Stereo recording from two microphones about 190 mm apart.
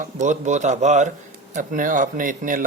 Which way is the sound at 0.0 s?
40° right (ahead or behind).